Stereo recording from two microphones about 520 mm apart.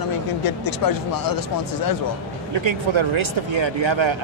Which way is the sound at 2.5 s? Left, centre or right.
Right.